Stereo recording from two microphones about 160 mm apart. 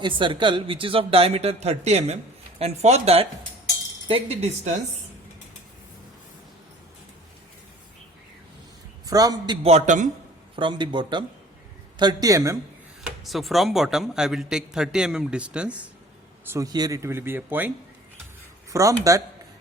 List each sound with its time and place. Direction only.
0.0 s speech: 30° right (ahead or behind)
9.0 s speech: 25° right (ahead or behind)
9.6 s a man's voice: 45° right (ahead or behind)
10.5 s speech: 30° right (ahead or behind)
13.1 s a man's voice: centre (ahead or behind)
16.5 s speech: 20° right (ahead or behind)
18.7 s speech: 20° right (ahead or behind)